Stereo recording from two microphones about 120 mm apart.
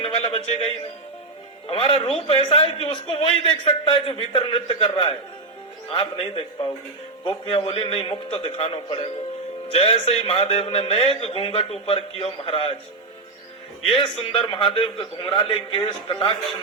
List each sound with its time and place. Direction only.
0.0 s a man's voice: 55° left (ahead or behind)
7.4 s a man's voice: 45° left (ahead or behind)
13.9 s a man's voice: 45° left (ahead or behind)